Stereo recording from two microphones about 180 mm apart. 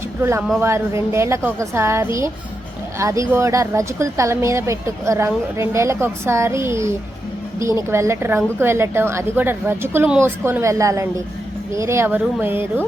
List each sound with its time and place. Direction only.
0.2 s a woman's voice: 15° right (ahead or behind)